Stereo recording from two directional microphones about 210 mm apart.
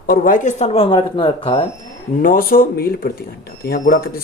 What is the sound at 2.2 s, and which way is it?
A man's voice, 45° left (ahead or behind).